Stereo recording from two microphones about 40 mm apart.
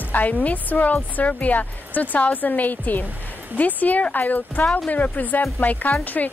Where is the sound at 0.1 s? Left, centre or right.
Left.